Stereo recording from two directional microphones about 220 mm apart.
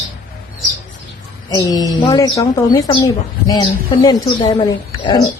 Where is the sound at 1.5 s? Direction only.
15° left (ahead or behind).